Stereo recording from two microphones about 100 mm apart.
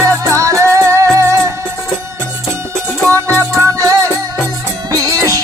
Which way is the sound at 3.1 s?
20° left (ahead or behind).